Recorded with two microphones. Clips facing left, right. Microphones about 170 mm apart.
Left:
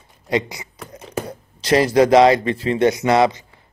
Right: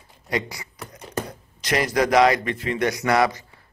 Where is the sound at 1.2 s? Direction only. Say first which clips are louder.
Left 8 dB; 30° left (ahead or behind).